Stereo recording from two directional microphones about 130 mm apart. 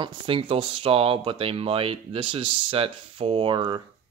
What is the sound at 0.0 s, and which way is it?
Speech, 40° right (ahead or behind).